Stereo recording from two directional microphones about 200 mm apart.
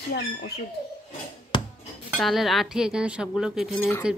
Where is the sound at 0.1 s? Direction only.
55° left (ahead or behind).